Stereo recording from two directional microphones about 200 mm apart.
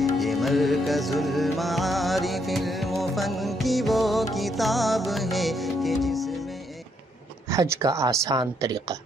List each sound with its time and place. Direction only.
0.0 s music: centre (ahead or behind)
7.4 s speech: 15° right (ahead or behind)